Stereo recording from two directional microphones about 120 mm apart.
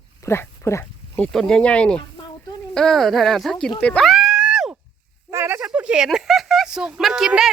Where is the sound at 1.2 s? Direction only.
5° left (ahead or behind).